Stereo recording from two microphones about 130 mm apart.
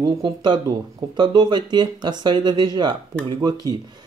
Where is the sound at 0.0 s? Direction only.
35° right (ahead or behind).